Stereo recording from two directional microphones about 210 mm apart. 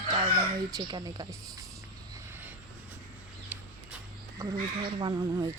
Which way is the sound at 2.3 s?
10° right (ahead or behind).